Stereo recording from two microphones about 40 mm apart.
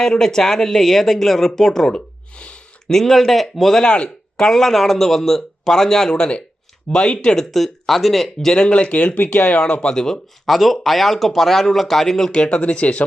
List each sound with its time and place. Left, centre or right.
0.0 s speech: centre
2.3 s a sound: left
2.9 s speech: centre
3.8 s speech: left
7.5 s speech: centre
8.5 s speech: left
8.8 s speech: left
9.6 s speech: left
10.4 s speech: centre
12.4 s speech: left